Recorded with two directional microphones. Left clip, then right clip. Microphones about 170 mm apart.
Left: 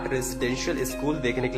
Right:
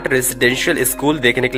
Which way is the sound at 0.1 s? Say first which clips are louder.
Right 15 dB; 40° right (ahead or behind).